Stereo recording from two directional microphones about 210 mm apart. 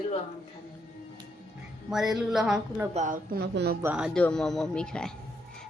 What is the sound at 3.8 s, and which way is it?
A woman's voice, 5° right (ahead or behind).